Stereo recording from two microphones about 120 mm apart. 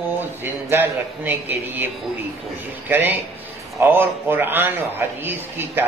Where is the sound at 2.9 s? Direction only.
15° right (ahead or behind).